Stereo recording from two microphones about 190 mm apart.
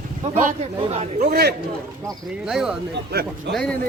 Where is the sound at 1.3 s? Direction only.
55° right (ahead or behind).